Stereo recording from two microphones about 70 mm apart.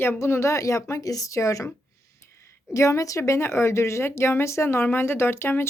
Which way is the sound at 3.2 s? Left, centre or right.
Left.